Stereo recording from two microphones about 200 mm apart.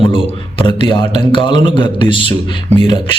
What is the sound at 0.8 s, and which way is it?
Speech, 25° left (ahead or behind).